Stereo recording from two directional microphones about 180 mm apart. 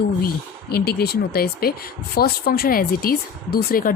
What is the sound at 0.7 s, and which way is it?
Speech, 60° left (ahead or behind).